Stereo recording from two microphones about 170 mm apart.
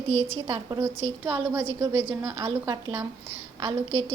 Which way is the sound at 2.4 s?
25° right (ahead or behind).